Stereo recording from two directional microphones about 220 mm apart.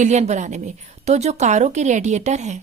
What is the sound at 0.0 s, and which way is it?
A woman's voice, 30° right (ahead or behind).